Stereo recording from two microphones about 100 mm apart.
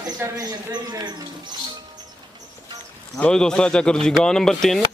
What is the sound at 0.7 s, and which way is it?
Speech, 45° right (ahead or behind).